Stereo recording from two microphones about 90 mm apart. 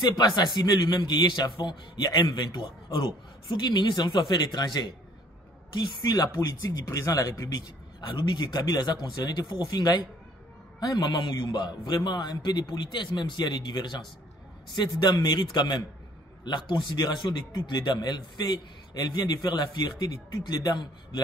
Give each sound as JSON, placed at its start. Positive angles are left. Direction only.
{"t": 0.6, "sound": "a man's voice", "side_deg": 50}
{"t": 6.1, "sound": "speech", "side_deg": 45}
{"t": 8.1, "sound": "a man's voice", "side_deg": 60}